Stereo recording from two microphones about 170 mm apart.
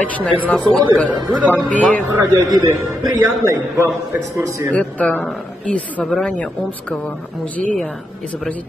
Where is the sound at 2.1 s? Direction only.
10° right (ahead or behind).